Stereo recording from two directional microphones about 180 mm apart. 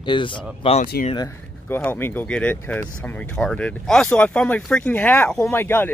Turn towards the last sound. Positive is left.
turn(degrees=10)  # may be behind; listen again after turning